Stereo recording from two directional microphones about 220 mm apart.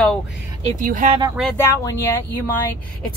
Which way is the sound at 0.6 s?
40° right (ahead or behind).